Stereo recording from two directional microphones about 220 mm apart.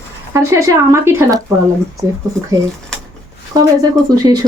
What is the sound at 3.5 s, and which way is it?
Speech, 15° right (ahead or behind).